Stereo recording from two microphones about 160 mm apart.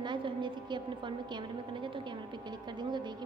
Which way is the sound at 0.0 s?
30° right (ahead or behind).